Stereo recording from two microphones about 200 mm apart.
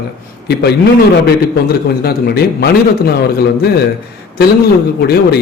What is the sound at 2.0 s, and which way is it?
Speech, 50° left (ahead or behind).